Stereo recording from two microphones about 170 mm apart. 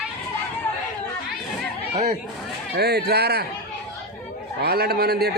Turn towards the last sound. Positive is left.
turn(degrees=-70)  # may be behind; listen again after turning